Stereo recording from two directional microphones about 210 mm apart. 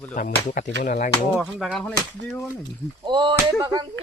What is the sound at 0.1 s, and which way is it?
Speech, 40° left (ahead or behind).